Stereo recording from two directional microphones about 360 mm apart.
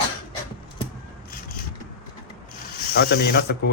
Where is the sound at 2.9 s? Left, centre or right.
Left.